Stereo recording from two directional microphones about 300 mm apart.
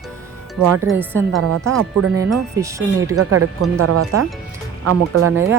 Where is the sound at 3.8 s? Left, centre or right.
Right.